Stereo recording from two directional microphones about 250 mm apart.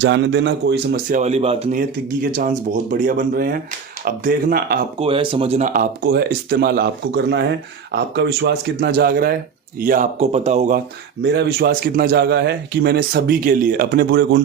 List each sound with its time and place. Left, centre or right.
0.0 s a man's voice: right
1.2 s speech: right
4.9 s speech: right
11.2 s speech: right